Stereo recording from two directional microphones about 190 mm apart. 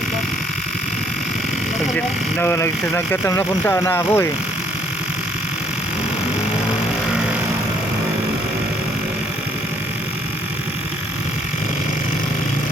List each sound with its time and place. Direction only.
2.4 s speech: 15° left (ahead or behind)